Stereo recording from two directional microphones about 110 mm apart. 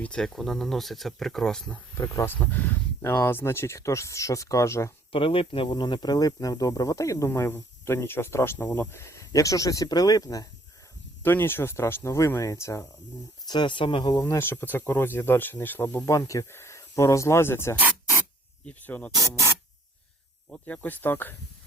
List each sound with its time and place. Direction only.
0.0 s speech: 5° left (ahead or behind)
2.0 s speech: 20° left (ahead or behind)
5.1 s speech: 55° left (ahead or behind); by 10.4 s 35° left (ahead or behind)
11.2 s speech: 20° left (ahead or behind)
13.5 s speech: 45° left (ahead or behind)
14.1 s speech: 30° left (ahead or behind); by 19.1 s 15° left (ahead or behind)
20.5 s speech: 10° left (ahead or behind)